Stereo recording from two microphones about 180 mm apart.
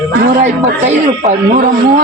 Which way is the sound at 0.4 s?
40° right (ahead or behind).